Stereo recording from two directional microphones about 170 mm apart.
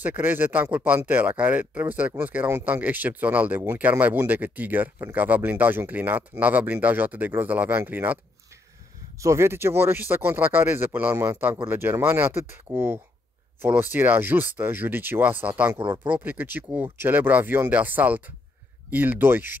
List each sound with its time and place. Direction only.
0.0 s speech: 10° right (ahead or behind)
9.2 s speech: 15° right (ahead or behind)
15.8 s speech: 25° right (ahead or behind)
16.1 s speech: 10° right (ahead or behind)